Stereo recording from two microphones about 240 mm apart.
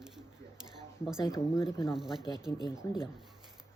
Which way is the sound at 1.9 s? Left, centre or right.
Centre.